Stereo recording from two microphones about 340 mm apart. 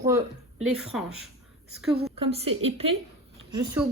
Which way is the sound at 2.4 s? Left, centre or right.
Right.